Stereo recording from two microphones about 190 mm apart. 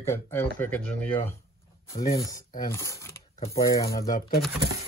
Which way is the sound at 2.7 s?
15° left (ahead or behind).